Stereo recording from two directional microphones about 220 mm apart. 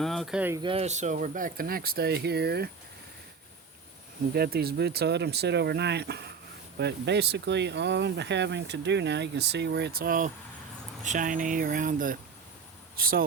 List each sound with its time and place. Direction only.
0.0 s speech: centre (ahead or behind)
0.6 s speech: 25° right (ahead or behind); by 2.6 s 45° right (ahead or behind)
4.4 s speech: 45° right (ahead or behind)